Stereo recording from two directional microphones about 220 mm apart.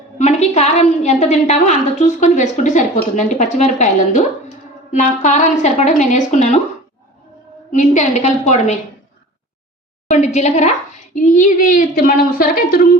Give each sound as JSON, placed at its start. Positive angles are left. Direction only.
{"t": 0.2, "sound": "a woman's voice", "side_deg": 30}
{"t": 7.8, "sound": "a woman's voice", "side_deg": 30}
{"t": 10.1, "sound": "a woman's voice", "side_deg": 30}